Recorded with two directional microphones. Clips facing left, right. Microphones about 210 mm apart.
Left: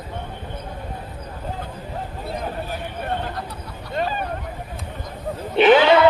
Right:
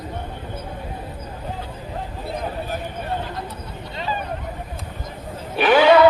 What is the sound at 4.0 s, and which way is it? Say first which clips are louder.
Vehicle: left 5 dB; 55° left (ahead or behind).